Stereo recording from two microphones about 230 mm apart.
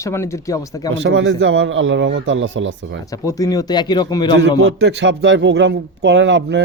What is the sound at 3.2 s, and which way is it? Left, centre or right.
Speech, centre.